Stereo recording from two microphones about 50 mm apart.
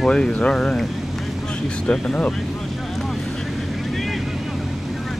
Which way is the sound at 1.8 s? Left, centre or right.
Centre.